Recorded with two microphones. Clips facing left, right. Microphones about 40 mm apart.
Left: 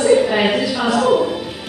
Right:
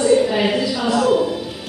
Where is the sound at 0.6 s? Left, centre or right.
Centre.